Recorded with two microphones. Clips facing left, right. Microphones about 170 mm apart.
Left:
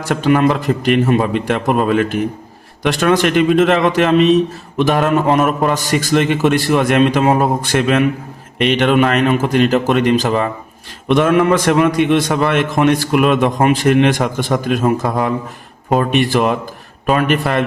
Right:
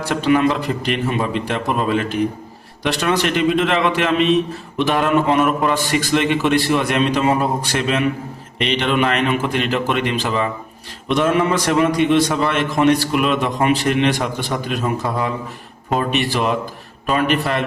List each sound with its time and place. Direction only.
0.0 s a man's voice: 45° left (ahead or behind)
11.1 s a man's voice: 55° left (ahead or behind)